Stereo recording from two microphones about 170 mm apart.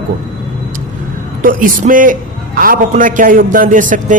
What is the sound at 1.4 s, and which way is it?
Speech, 55° right (ahead or behind).